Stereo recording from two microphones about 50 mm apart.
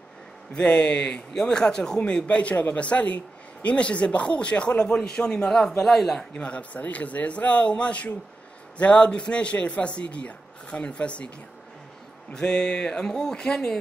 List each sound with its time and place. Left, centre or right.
0.6 s speech: left; by 6.2 s centre
6.3 s speech: left
12.4 s a sound: centre